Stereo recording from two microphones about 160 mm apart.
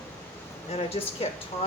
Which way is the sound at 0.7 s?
40° left (ahead or behind).